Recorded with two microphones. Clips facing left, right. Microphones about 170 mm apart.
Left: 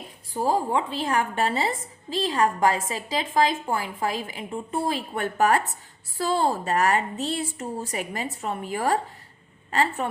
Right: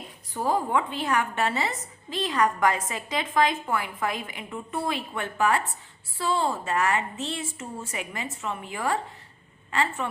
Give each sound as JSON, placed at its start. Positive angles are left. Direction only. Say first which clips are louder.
{"t": 0.3, "sound": "a woman's voice", "louder": "left 2 dB", "side_deg": 30}